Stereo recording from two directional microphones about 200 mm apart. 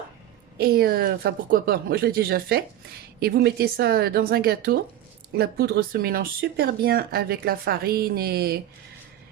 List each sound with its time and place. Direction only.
0.6 s speech: 50° right (ahead or behind)